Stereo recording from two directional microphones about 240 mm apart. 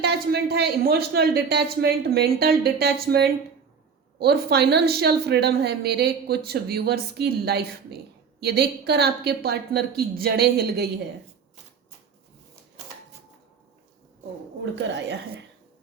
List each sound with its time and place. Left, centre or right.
0.0 s a woman's voice: right
14.6 s speech: right